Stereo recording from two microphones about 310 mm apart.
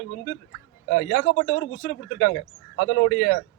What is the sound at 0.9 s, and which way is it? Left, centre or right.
A man's voice, left.